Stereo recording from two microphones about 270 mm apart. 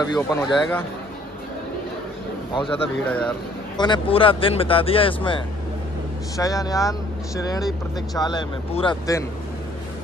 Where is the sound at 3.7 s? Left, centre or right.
Centre.